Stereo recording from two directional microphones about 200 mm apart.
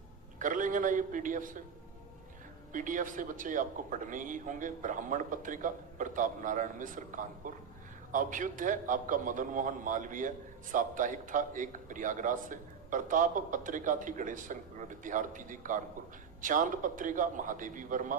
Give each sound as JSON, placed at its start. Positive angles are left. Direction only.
{"t": 0.3, "sound": "a man's voice", "side_deg": -40}
{"t": 2.7, "sound": "a man's voice", "side_deg": -40}